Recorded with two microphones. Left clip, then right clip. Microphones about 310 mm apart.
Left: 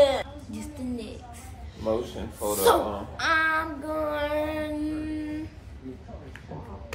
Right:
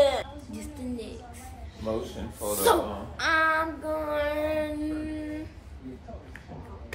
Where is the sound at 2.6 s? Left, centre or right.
Centre.